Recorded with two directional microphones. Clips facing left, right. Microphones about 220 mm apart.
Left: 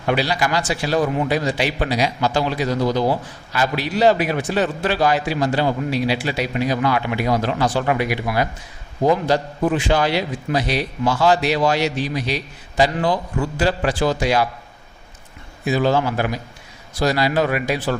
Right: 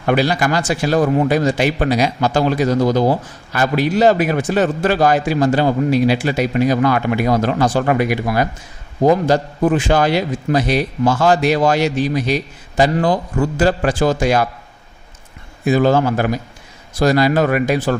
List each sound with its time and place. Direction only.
0.1 s a man's voice: 50° right (ahead or behind)
15.6 s a man's voice: 50° right (ahead or behind)